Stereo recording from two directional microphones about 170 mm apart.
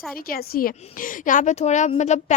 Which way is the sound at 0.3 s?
60° left (ahead or behind).